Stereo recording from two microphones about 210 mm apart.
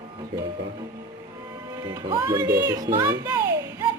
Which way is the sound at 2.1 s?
15° right (ahead or behind).